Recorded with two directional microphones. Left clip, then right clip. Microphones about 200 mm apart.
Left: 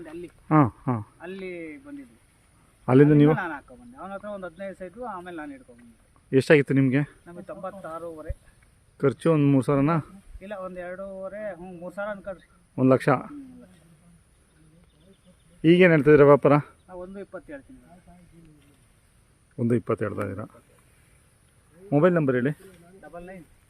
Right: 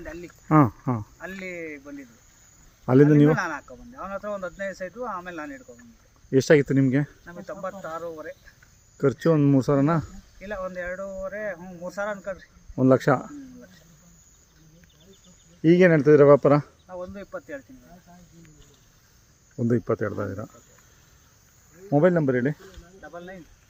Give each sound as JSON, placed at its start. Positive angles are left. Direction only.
{"t": 0.4, "sound": "speech", "side_deg": 0}
{"t": 1.2, "sound": "speech", "side_deg": -30}
{"t": 2.8, "sound": "speech", "side_deg": 10}
{"t": 3.3, "sound": "speech", "side_deg": -25}
{"t": 6.3, "sound": "speech", "side_deg": 5}
{"t": 7.3, "sound": "speech", "side_deg": -25}
{"t": 9.0, "sound": "speech", "side_deg": 5}
{"t": 10.4, "sound": "speech", "side_deg": -25}
{"t": 12.7, "sound": "speech", "side_deg": 5}
{"t": 15.6, "sound": "speech", "side_deg": 5}
{"t": 16.8, "sound": "speech", "side_deg": -25}
{"t": 19.5, "sound": "speech", "side_deg": 10}
{"t": 21.8, "sound": "speech", "side_deg": 10}